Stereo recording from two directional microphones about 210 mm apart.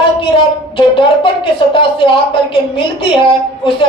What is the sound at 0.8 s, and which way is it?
A woman's voice, 25° left (ahead or behind).